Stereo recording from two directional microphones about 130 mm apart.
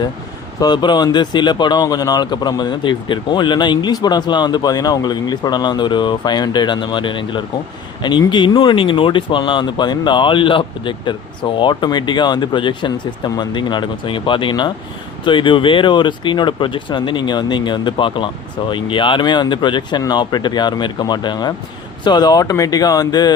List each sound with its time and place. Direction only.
0.6 s speech: 35° left (ahead or behind)